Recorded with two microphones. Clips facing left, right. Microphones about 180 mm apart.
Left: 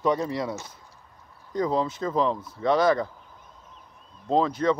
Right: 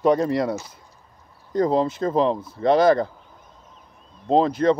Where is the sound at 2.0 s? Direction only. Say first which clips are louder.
Right 5 dB; 45° right (ahead or behind).